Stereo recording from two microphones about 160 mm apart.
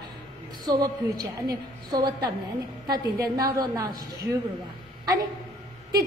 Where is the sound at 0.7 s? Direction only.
25° right (ahead or behind).